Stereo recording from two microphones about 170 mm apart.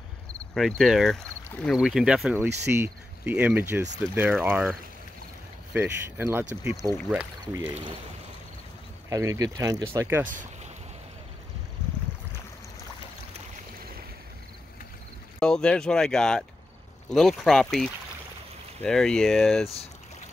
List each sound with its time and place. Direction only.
0.6 s speech: centre (ahead or behind)
9.1 s speech: 20° right (ahead or behind)
10.2 s speech: 50° right (ahead or behind)
15.3 s speech: 5° left (ahead or behind)